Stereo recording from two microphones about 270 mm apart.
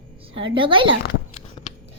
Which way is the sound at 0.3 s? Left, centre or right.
Centre.